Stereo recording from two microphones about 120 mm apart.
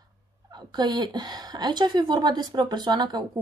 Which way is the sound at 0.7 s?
35° right (ahead or behind).